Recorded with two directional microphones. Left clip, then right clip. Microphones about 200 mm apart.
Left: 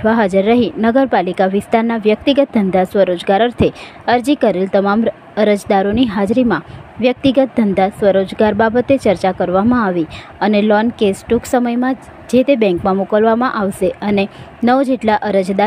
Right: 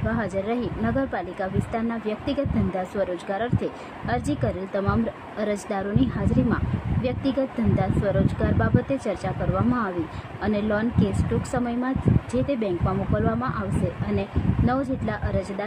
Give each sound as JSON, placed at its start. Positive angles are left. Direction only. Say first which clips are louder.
{"t": 0.0, "sound": "speech", "louder": "left 14 dB", "side_deg": 40}